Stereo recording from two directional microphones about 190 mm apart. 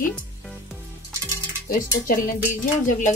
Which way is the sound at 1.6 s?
45° left (ahead or behind).